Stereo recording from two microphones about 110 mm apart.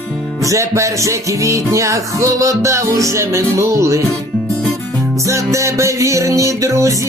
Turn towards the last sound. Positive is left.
turn(degrees=-30)  # may be behind; listen again after turning